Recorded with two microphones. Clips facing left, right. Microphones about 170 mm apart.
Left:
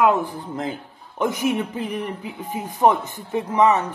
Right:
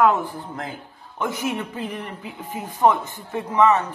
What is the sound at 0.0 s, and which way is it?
Speech, 15° left (ahead or behind).